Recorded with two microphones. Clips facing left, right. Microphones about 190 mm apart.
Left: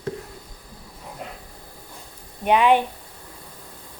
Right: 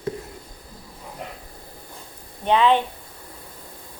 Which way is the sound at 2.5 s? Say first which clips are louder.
Left 1 dB; 15° left (ahead or behind).